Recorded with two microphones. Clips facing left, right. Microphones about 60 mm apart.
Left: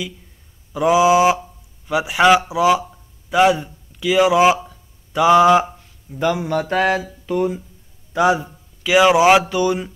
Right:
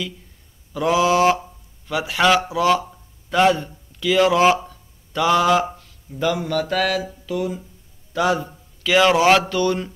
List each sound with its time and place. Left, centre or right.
0.7 s speech: centre
2.9 s a sound: centre
6.1 s speech: centre
7.2 s speech: left
8.1 s a man's voice: centre